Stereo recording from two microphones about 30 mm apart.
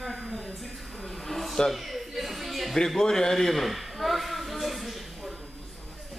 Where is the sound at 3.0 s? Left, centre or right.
Centre.